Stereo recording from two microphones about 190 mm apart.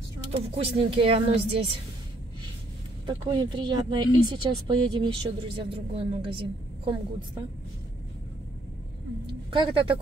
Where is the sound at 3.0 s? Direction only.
20° right (ahead or behind).